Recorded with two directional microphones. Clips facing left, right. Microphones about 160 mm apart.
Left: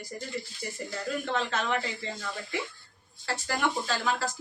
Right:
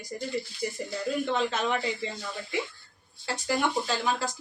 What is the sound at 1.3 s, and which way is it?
Speech, 15° right (ahead or behind).